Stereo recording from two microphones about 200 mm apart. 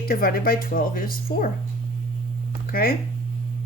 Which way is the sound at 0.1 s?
45° left (ahead or behind).